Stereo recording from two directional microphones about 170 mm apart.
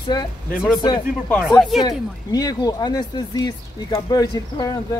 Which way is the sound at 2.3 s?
20° left (ahead or behind).